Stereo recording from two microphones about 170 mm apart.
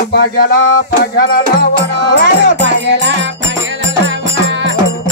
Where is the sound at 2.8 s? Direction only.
90° right.